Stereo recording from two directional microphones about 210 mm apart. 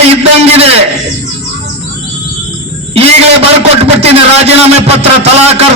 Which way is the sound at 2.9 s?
30° right (ahead or behind).